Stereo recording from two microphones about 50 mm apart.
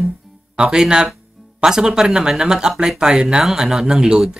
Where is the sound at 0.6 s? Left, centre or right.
Centre.